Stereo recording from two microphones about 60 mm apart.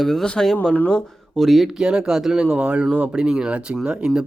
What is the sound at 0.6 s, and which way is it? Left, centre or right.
Speech, centre.